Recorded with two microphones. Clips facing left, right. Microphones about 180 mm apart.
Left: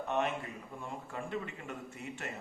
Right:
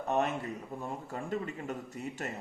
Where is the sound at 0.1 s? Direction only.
40° right (ahead or behind).